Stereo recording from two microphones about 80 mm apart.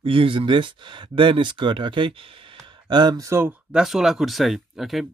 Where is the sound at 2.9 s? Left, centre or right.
Right.